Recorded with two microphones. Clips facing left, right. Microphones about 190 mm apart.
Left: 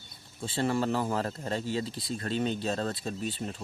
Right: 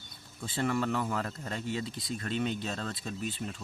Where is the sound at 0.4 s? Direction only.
30° left (ahead or behind).